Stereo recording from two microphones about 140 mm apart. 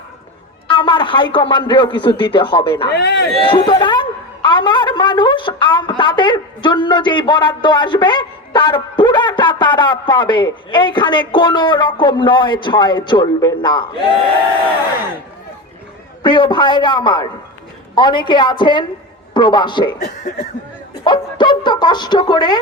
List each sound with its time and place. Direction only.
0.7 s a woman's voice: 35° left (ahead or behind)
16.2 s a woman's voice: 35° left (ahead or behind)
21.0 s a woman's voice: 35° left (ahead or behind)